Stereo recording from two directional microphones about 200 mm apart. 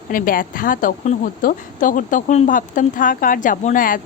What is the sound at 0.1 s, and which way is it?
A woman's voice, 45° left (ahead or behind).